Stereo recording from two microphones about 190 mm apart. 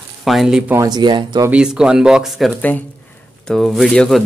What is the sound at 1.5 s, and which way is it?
Speech, 5° right (ahead or behind).